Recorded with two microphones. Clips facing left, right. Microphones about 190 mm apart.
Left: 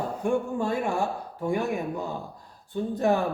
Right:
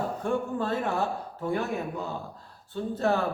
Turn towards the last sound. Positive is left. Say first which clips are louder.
# left 2 dB
turn(degrees=15)  # may be behind; listen again after turning